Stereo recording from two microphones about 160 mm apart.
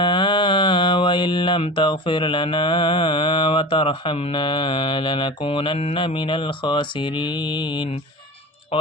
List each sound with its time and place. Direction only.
0.0 s mantra: 30° left (ahead or behind)
8.7 s speech: 35° left (ahead or behind)